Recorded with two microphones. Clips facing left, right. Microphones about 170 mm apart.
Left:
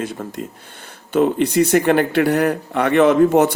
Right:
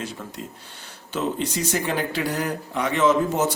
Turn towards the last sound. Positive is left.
turn(degrees=65)  # may be behind; listen again after turning